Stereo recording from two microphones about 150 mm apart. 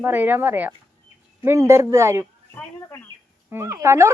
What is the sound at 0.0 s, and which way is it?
A child's voice, 15° right (ahead or behind).